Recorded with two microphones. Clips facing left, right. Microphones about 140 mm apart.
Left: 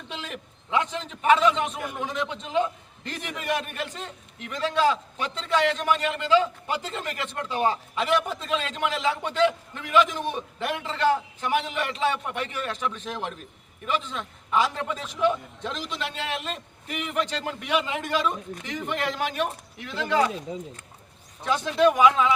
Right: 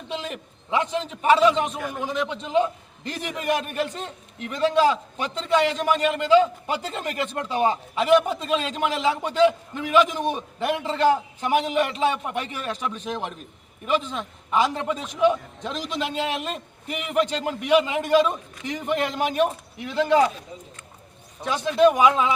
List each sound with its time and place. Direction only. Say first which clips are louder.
0.8 s a man's voice: right 2 dB; 30° right (ahead or behind)
20.5 s speech: left 7 dB; 90° left
21.4 s a man's voice: right 3 dB; 15° right (ahead or behind)